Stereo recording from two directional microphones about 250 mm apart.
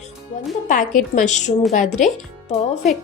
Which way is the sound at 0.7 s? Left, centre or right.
Left.